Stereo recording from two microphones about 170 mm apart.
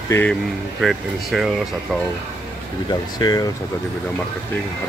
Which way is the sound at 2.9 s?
25° left (ahead or behind).